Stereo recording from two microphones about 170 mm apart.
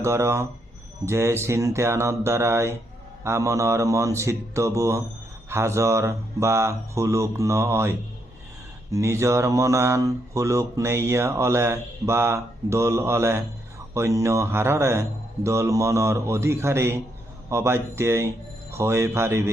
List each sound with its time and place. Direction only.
0.0 s speech: 15° right (ahead or behind)